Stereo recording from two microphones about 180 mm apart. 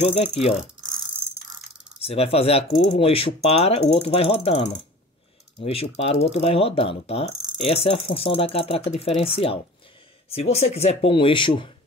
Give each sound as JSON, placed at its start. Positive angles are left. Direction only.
{"t": 0.0, "sound": "speech", "side_deg": 35}
{"t": 2.0, "sound": "speech", "side_deg": 35}